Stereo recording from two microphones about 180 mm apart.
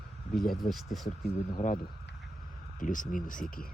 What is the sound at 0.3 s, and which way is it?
Speech, 55° left (ahead or behind).